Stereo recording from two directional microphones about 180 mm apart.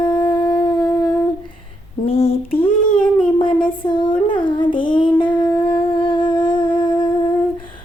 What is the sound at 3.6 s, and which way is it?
Child singing, 25° left (ahead or behind).